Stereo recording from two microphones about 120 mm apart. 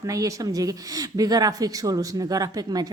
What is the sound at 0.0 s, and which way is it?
A woman's voice, 30° right (ahead or behind).